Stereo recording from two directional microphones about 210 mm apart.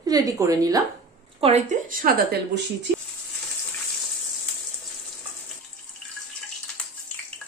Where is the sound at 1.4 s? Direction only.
25° right (ahead or behind).